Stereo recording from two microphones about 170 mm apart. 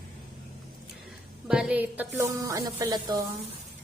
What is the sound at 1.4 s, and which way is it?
Music, 5° right (ahead or behind).